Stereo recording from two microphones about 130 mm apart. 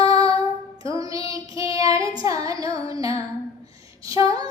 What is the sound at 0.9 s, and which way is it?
Child singing, 25° right (ahead or behind).